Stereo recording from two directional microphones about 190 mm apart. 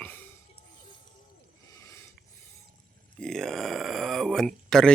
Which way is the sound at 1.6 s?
15° left (ahead or behind).